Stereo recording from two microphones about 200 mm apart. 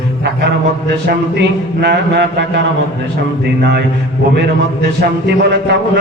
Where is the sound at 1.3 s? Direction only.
55° right (ahead or behind).